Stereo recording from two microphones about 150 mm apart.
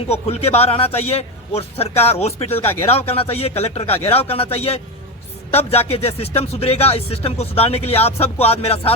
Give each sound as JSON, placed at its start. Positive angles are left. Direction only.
{"t": 0.1, "sound": "a man's voice", "side_deg": 45}